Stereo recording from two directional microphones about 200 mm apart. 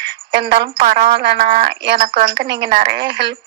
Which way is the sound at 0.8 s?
45° right (ahead or behind).